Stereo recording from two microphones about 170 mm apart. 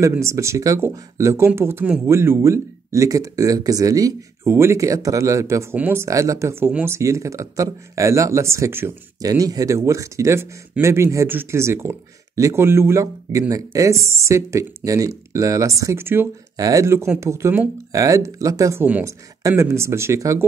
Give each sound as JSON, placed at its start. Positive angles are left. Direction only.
{"t": 0.0, "sound": "speech", "side_deg": -15}